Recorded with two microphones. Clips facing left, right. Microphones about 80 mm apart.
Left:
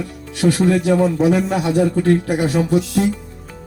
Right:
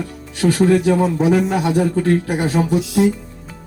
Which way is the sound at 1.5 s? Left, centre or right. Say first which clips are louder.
Even; right.